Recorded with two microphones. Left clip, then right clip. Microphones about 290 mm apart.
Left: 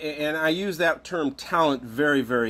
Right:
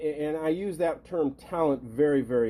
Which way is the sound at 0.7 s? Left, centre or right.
Centre.